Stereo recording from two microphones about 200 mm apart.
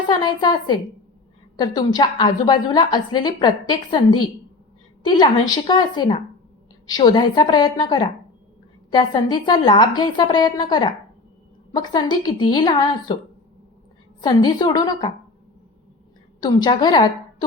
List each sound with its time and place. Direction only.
0.1 s a woman's voice: 20° left (ahead or behind)
14.2 s a woman's voice: 20° left (ahead or behind)
16.4 s a woman's voice: 20° left (ahead or behind)